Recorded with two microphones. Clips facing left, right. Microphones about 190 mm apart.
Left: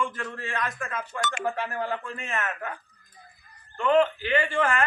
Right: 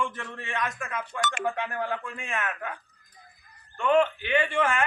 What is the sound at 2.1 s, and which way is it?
Speech, 10° right (ahead or behind).